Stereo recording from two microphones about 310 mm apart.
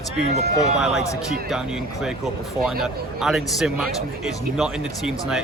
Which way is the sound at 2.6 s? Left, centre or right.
Centre.